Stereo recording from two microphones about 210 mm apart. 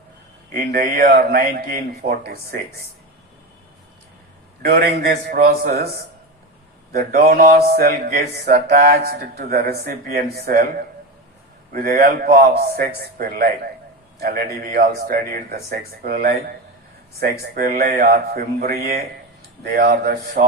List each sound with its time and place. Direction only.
0.5 s mantra: 45° right (ahead or behind)
4.8 s mantra: 50° right (ahead or behind)
6.9 s mantra: 45° right (ahead or behind)
11.7 s mantra: 45° right (ahead or behind)